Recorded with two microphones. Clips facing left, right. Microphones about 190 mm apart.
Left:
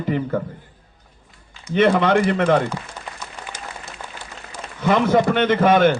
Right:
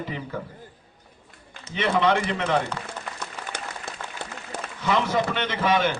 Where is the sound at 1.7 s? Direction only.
55° left (ahead or behind).